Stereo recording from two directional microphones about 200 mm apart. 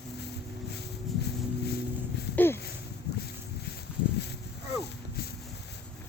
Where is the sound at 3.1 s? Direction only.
55° left (ahead or behind).